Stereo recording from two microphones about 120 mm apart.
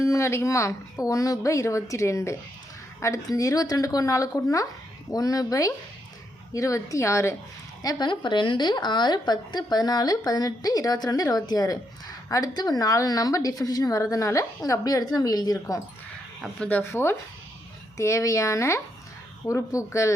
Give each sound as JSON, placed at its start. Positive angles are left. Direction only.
{"t": 0.0, "sound": "a woman's voice", "side_deg": 25}
{"t": 7.8, "sound": "a woman's voice", "side_deg": 35}
{"t": 16.6, "sound": "a woman's voice", "side_deg": 15}